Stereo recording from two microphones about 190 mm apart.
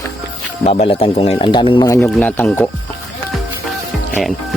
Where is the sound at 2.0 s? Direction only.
5° left (ahead or behind).